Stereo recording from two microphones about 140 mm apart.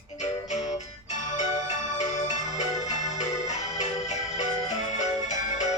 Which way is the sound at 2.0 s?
55° left (ahead or behind).